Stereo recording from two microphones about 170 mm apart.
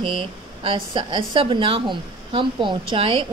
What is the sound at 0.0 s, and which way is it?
A man's voice, 30° right (ahead or behind).